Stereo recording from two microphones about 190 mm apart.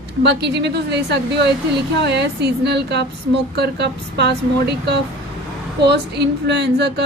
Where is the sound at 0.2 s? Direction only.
60° right (ahead or behind).